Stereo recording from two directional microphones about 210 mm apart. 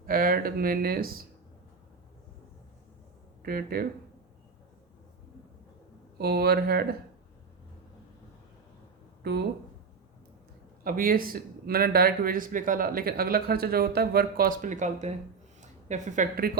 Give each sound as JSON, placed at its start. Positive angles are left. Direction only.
{"t": 0.0, "sound": "speech", "side_deg": -45}
{"t": 3.4, "sound": "speech", "side_deg": -45}
{"t": 6.1, "sound": "speech", "side_deg": -50}
{"t": 9.2, "sound": "speech", "side_deg": -50}
{"t": 10.8, "sound": "speech", "side_deg": -45}